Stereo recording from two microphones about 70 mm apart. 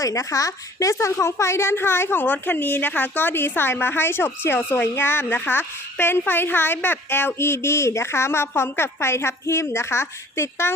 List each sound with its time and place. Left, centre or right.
0.0 s a woman's voice: left